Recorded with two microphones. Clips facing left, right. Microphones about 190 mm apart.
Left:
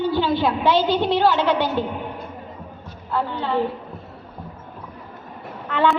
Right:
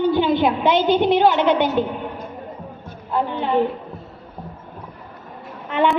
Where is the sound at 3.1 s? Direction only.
20° right (ahead or behind).